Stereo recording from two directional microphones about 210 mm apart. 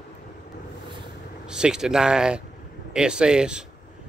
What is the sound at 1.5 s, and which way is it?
Speech, 5° right (ahead or behind).